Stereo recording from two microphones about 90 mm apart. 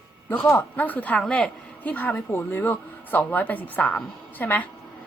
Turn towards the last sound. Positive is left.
turn(degrees=20)  # may be behind; listen again after turning